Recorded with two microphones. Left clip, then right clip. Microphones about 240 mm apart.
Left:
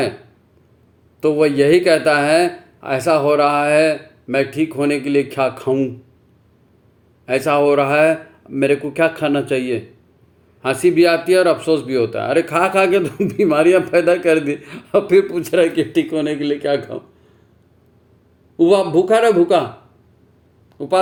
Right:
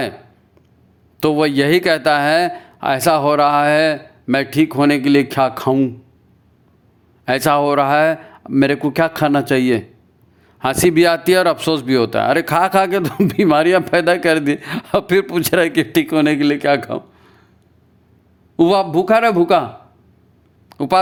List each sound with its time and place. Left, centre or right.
1.2 s speech: right
7.3 s speech: right
18.5 s speech: right
20.7 s a sound: right